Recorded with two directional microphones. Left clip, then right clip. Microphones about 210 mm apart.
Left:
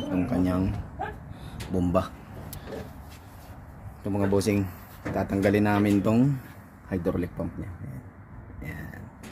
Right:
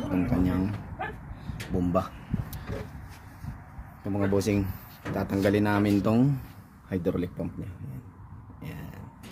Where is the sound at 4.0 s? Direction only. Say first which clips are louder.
Left 2 dB; centre (ahead or behind).